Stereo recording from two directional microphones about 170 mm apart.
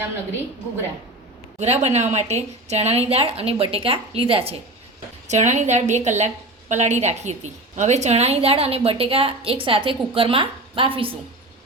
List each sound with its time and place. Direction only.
1.5 s a woman's voice: 40° right (ahead or behind)